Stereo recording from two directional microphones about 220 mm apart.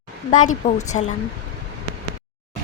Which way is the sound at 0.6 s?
35° left (ahead or behind).